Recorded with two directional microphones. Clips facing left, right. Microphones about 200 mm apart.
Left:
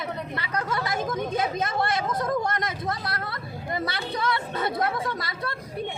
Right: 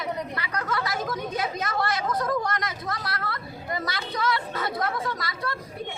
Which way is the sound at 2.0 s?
25° left (ahead or behind).